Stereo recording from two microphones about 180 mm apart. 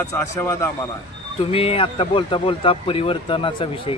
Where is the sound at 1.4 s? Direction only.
30° left (ahead or behind).